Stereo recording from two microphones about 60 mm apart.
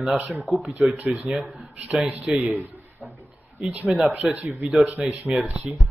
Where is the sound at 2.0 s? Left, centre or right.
Centre.